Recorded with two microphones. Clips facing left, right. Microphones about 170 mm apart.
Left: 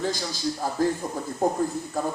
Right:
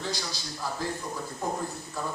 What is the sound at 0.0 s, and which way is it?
Speech, 45° left (ahead or behind).